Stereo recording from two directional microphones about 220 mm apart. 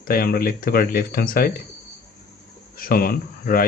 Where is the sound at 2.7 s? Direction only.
40° left (ahead or behind).